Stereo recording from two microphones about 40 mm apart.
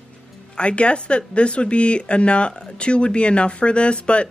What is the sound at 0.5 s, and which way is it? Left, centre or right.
Speech, left.